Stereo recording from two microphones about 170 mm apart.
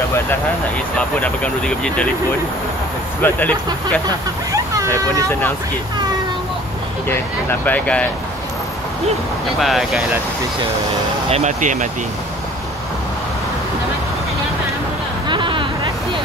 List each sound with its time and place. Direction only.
0.9 s speech: 5° left (ahead or behind)
3.2 s speech: 10° left (ahead or behind)
7.1 s speech: 10° left (ahead or behind)
9.6 s speech: centre (ahead or behind)
11.2 s speech: 40° right (ahead or behind)
15.2 s a sound: 30° right (ahead or behind)